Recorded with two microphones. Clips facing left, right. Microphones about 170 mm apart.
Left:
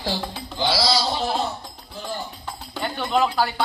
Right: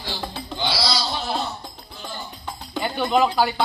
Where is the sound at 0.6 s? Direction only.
90° left.